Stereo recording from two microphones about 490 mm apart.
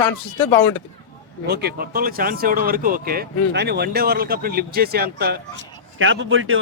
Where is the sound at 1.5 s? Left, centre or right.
Centre.